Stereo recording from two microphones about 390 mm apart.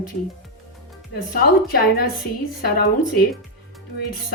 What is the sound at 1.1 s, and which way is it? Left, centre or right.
A woman's voice, left.